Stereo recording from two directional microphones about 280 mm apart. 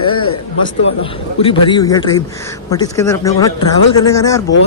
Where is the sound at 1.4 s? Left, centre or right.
Centre.